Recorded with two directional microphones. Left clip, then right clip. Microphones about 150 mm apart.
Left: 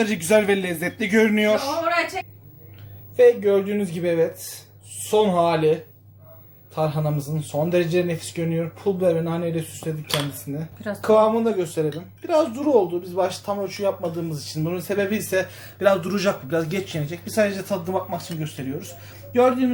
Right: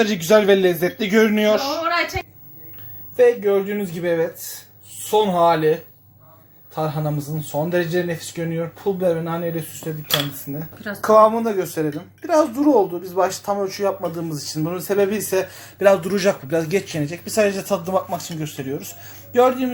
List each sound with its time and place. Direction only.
0.0 s speech: 20° right (ahead or behind)
3.2 s speech: 20° right (ahead or behind)
6.7 s speech: 20° right (ahead or behind)
11.0 s speech: 20° right (ahead or behind)